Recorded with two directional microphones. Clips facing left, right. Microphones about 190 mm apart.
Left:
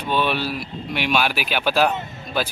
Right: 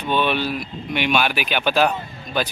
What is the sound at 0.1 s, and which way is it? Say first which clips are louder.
A man's voice: right 1 dB; 5° left (ahead or behind).